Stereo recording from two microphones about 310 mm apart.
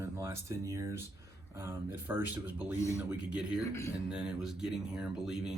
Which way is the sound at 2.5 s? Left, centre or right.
Centre.